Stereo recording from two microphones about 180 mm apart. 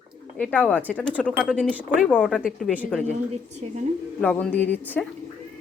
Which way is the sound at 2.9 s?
5° left (ahead or behind).